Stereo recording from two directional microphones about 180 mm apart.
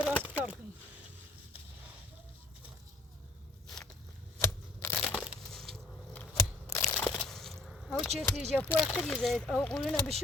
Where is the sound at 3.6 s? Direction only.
5° left (ahead or behind).